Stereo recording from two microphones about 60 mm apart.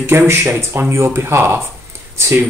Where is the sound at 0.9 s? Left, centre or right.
Right.